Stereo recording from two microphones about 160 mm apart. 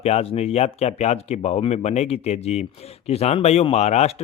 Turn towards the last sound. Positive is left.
turn(degrees=45)  # may be behind; listen again after turning